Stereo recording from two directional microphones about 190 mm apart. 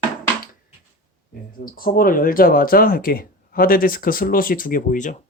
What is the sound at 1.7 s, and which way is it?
Speech, 50° left (ahead or behind).